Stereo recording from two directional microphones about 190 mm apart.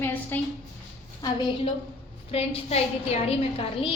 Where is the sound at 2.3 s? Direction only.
30° left (ahead or behind).